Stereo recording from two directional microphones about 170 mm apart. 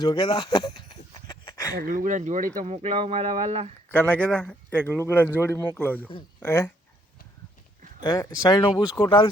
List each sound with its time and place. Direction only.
0.0 s speech: 25° left (ahead or behind)
1.8 s speech: 55° right (ahead or behind)
2.6 s speech: 35° right (ahead or behind)
3.8 s speech: 10° left (ahead or behind)
8.0 s speech: 20° left (ahead or behind)